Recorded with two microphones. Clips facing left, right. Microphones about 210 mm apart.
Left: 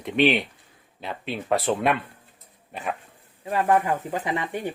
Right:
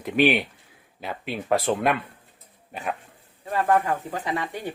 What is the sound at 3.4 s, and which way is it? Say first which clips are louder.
Speech: left 1 dB; 15° left (ahead or behind).